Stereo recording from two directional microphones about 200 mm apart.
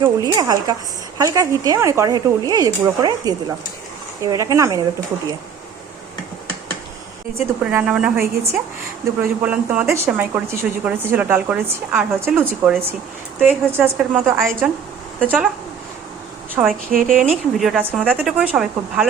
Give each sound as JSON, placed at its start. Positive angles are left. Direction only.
{"t": 0.0, "sound": "speech", "side_deg": -20}
{"t": 7.3, "sound": "speech", "side_deg": -10}
{"t": 16.6, "sound": "speech", "side_deg": -5}
{"t": 16.9, "sound": "speech", "side_deg": -45}
{"t": 17.2, "sound": "speech", "side_deg": -5}